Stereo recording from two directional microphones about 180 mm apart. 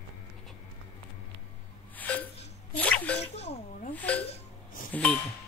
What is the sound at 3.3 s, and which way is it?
Speech, 35° left (ahead or behind).